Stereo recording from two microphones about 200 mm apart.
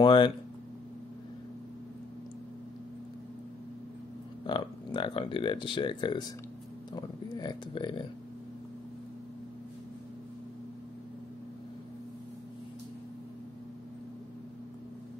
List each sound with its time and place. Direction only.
0.0 s speech: 25° left (ahead or behind)
4.5 s speech: 25° left (ahead or behind)